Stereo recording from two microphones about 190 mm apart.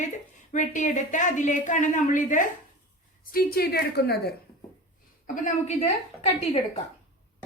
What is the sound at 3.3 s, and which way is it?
A woman's voice, 55° left (ahead or behind).